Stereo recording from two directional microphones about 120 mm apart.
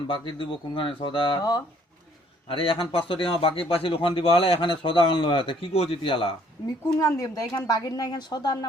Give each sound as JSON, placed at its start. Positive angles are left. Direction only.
{"t": 0.1, "sound": "speech", "side_deg": 45}
{"t": 7.0, "sound": "speech", "side_deg": 30}